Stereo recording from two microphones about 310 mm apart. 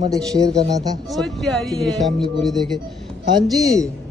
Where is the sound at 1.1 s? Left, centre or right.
Centre.